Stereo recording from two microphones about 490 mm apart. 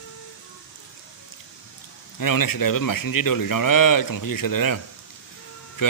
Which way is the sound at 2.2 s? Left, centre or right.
Left.